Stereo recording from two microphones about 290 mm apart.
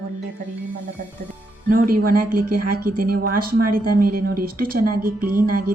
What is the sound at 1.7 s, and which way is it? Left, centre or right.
A woman's voice, right.